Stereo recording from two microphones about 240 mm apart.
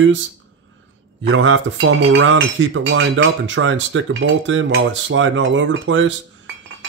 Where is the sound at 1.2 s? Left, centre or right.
Right.